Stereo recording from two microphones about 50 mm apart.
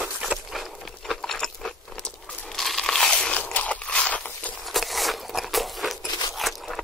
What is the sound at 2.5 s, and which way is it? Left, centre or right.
Crunch, centre.